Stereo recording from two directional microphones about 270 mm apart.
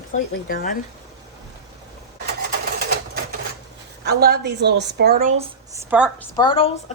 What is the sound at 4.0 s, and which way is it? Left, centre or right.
A woman's voice, right.